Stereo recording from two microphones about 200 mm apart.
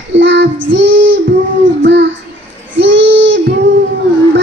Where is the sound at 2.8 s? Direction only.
65° right (ahead or behind).